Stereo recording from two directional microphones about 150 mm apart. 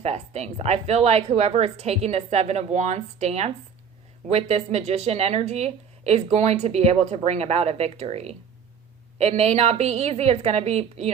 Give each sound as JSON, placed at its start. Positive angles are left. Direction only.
{"t": 0.0, "sound": "speech", "side_deg": -45}